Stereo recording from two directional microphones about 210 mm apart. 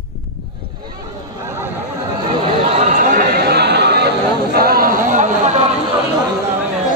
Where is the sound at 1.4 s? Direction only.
10° right (ahead or behind).